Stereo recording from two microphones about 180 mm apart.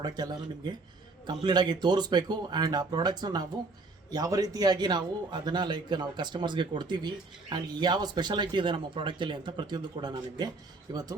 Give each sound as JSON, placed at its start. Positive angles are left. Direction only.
{"t": 0.0, "sound": "speech", "side_deg": -20}